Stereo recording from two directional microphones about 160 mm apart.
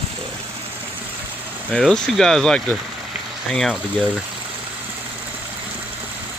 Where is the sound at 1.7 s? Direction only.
Centre (ahead or behind).